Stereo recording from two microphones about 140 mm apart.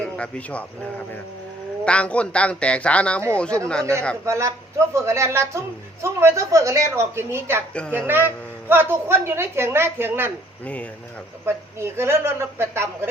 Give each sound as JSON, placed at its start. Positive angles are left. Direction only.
{"t": 0.0, "sound": "a man's voice", "side_deg": 10}
{"t": 1.8, "sound": "a man's voice", "side_deg": 10}
{"t": 4.3, "sound": "a woman's voice", "side_deg": -20}
{"t": 11.4, "sound": "a woman's voice", "side_deg": -20}